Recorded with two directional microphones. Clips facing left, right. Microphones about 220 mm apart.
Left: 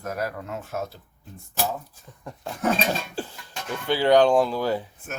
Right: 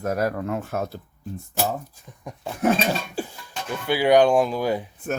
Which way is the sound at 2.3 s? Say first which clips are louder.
Right 4 dB; 15° right (ahead or behind).